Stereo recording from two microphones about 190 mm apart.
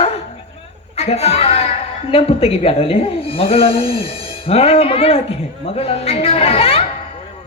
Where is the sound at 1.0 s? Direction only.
35° left (ahead or behind).